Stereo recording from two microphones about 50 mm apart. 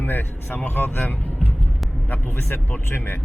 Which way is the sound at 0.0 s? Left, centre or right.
Left.